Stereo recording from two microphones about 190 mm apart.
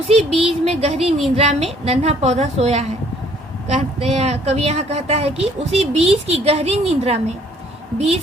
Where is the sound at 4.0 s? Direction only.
35° right (ahead or behind).